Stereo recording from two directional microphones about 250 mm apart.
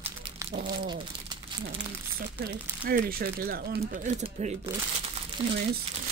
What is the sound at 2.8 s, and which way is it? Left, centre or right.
Speech, right.